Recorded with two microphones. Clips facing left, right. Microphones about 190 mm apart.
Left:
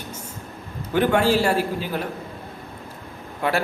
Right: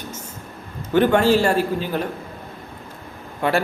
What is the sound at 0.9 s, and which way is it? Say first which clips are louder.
A man's voice: right 3 dB; 10° left (ahead or behind).